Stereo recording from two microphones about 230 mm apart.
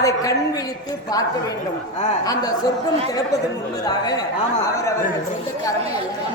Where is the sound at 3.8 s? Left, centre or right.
Centre.